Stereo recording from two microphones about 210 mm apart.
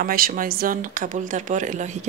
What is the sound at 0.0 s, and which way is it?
Speech, 45° right (ahead or behind).